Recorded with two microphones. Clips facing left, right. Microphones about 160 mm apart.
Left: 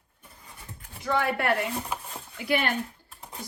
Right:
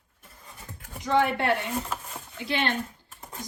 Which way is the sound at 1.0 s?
20° right (ahead or behind).